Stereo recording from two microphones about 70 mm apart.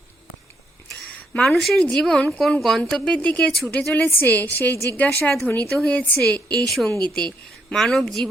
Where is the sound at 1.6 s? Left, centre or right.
Centre.